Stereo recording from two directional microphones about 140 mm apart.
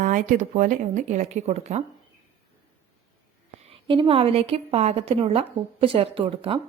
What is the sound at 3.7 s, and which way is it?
A woman's voice, 40° right (ahead or behind).